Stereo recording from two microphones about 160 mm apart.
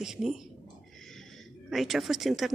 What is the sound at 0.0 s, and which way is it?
Speech, 5° right (ahead or behind).